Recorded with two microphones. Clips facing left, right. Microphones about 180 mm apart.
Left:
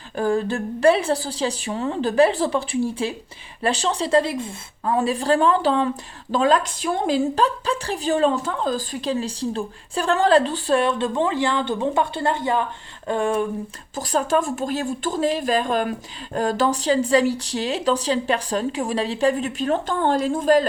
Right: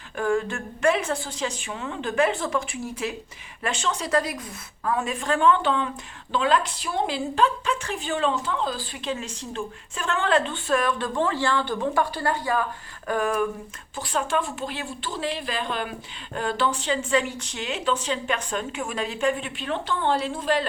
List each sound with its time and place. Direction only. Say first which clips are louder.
0.2 s a woman's voice: left 3 dB; 35° left (ahead or behind)
13.1 s a sound: left 3 dB; 25° left (ahead or behind)
13.9 s a woman's voice: left 5 dB; 40° left (ahead or behind)